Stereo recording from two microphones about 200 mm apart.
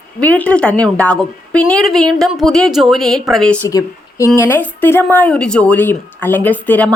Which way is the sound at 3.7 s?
20° left (ahead or behind).